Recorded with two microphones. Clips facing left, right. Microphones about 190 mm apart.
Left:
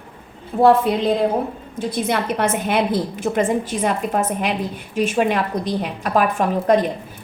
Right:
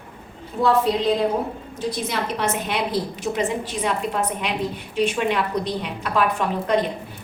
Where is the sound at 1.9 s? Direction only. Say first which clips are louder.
Left 8 dB; 55° left (ahead or behind).